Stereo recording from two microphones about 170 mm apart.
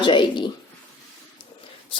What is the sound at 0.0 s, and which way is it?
Speech, 30° left (ahead or behind).